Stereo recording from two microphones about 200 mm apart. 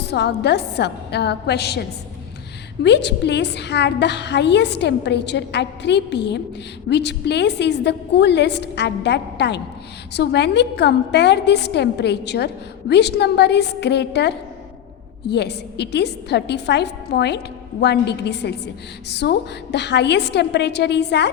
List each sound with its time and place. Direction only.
0.0 s a woman's voice: 55° left (ahead or behind)
2.8 s a woman's voice: 60° left (ahead or behind)